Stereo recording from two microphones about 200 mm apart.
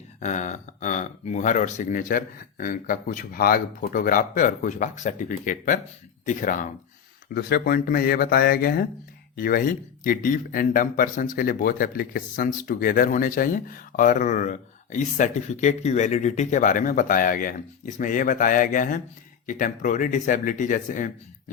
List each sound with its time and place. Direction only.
0.2 s speech: 35° left (ahead or behind)